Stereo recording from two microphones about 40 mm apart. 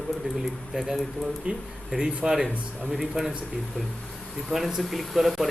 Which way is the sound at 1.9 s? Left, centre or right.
Right.